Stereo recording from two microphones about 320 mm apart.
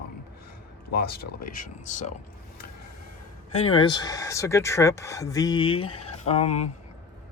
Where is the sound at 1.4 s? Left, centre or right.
Left.